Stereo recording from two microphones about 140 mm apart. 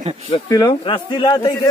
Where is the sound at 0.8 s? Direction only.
35° left (ahead or behind).